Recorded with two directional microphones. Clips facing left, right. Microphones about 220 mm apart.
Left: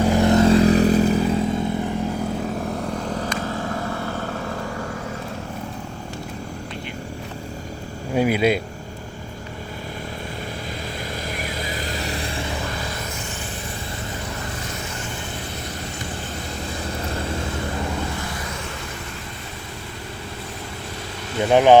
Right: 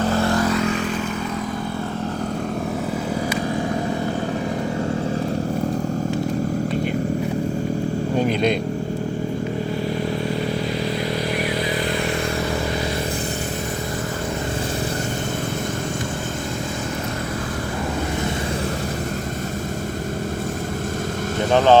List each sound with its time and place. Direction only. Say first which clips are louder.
0.0 s vehicle: left 4 dB; 15° left (ahead or behind)
3.2 s vehicle: right 4 dB; 15° right (ahead or behind)
8.1 s speech: left 2 dB; 10° left (ahead or behind)
21.5 s vehicle: left 2 dB; 15° left (ahead or behind)